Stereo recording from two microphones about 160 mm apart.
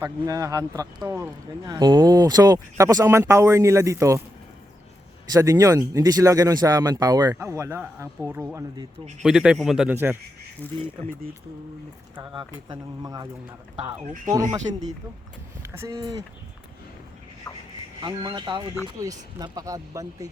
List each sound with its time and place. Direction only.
0.0 s speech: 20° right (ahead or behind)
5.3 s speech: 20° right (ahead or behind)
9.2 s speech: 5° right (ahead or behind)
9.9 s speech: 15° right (ahead or behind)
10.6 s speech: 10° left (ahead or behind)
12.3 s speech: 30° right (ahead or behind)
14.3 s speech: 20° right (ahead or behind)
15.8 s speech: 20° right (ahead or behind)
18.0 s speech: 25° right (ahead or behind)